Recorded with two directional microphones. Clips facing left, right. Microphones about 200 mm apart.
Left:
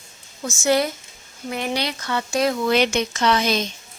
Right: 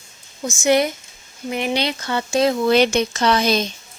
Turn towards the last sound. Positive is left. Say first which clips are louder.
# right 2 dB
turn(degrees=-35)  # may be behind; listen again after turning